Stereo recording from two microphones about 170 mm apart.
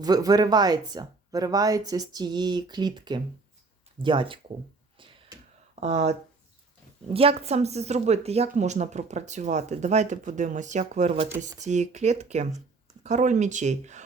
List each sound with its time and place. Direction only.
0.0 s speech: 20° right (ahead or behind)
4.9 s a sound: 30° right (ahead or behind)
5.8 s a woman's voice: 40° right (ahead or behind)